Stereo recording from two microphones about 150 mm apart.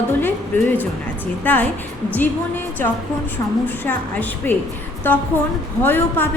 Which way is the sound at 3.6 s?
10° left (ahead or behind).